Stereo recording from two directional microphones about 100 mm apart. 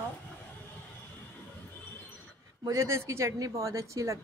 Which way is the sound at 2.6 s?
30° right (ahead or behind).